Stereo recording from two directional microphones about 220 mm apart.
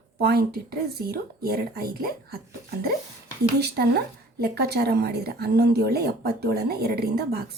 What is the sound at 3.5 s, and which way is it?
Speech, 45° right (ahead or behind).